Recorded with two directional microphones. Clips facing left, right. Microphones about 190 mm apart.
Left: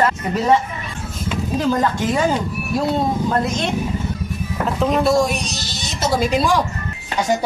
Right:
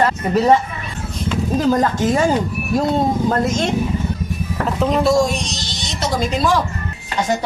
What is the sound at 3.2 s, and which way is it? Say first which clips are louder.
Speech: right 2 dB; 45° right (ahead or behind).